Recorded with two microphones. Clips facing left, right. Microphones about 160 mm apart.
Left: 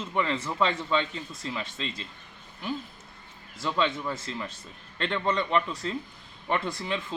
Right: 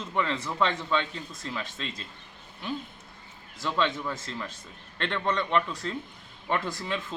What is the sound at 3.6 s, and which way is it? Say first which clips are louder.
A man's voice: even; 5° left (ahead or behind).